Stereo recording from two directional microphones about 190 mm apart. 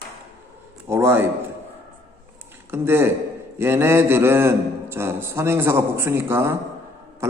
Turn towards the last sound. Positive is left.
turn(degrees=-15)  # may be behind; listen again after turning